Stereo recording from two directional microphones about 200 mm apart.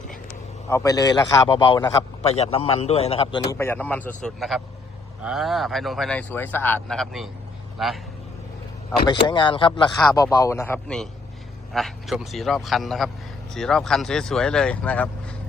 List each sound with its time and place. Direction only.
0.7 s a man's voice: 15° left (ahead or behind)
3.5 s a man's voice: 10° left (ahead or behind)
9.2 s a man's voice: 25° left (ahead or behind); by 15.1 s 5° left (ahead or behind)